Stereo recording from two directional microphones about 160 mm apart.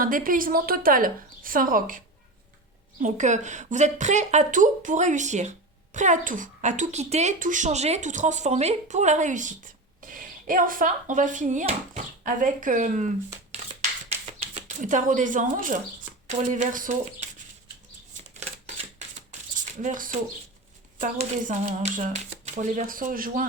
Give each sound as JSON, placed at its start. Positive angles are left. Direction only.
{"t": 0.0, "sound": "a woman's voice", "side_deg": -60}
{"t": 3.0, "sound": "a woman's voice", "side_deg": -50}
{"t": 14.1, "sound": "a sound", "side_deg": -45}
{"t": 16.2, "sound": "a woman's voice", "side_deg": -50}
{"t": 18.3, "sound": "typewriter", "side_deg": -45}
{"t": 19.8, "sound": "a woman's voice", "side_deg": -55}